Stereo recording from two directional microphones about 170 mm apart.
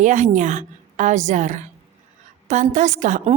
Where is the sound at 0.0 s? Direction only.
45° right (ahead or behind).